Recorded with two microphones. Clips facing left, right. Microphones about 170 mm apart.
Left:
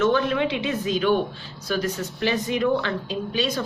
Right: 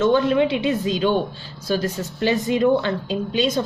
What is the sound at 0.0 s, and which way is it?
A woman's voice, 30° right (ahead or behind).